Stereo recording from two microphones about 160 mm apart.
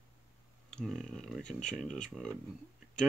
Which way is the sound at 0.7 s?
5° left (ahead or behind).